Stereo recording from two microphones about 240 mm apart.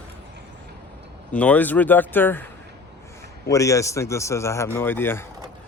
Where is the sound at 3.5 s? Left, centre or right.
Centre.